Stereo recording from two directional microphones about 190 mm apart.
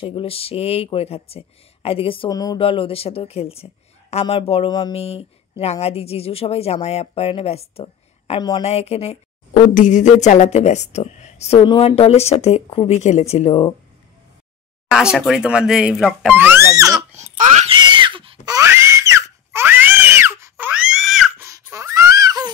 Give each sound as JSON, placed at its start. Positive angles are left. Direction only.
{"t": 0.0, "sound": "speech", "side_deg": 30}
{"t": 8.6, "sound": "speech", "side_deg": 35}
{"t": 14.9, "sound": "speech", "side_deg": -5}
{"t": 16.3, "sound": "speech", "side_deg": -10}
{"t": 17.1, "sound": "a sound", "side_deg": -40}
{"t": 17.7, "sound": "screaming", "side_deg": -25}
{"t": 21.5, "sound": "a sound", "side_deg": -15}